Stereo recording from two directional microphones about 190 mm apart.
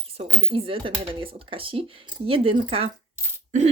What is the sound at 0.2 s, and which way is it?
Speech, 30° right (ahead or behind).